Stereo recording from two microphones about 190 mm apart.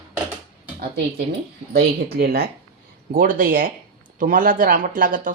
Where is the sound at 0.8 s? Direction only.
55° right (ahead or behind).